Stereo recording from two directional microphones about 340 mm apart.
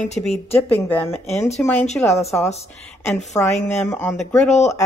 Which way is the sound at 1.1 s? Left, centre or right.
Centre.